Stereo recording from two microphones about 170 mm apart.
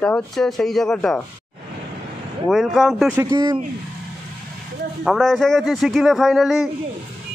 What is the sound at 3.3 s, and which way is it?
Speech, 25° right (ahead or behind).